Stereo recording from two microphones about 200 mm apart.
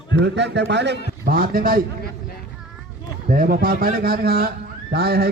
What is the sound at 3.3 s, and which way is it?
A man's voice, 45° right (ahead or behind).